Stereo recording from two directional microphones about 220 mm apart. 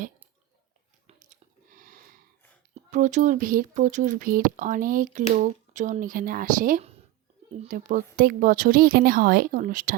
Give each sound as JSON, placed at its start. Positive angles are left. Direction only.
{"t": 1.0, "sound": "chewing", "side_deg": -35}
{"t": 2.7, "sound": "speech", "side_deg": -35}